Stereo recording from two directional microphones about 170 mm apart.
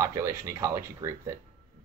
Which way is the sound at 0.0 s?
15° right (ahead or behind).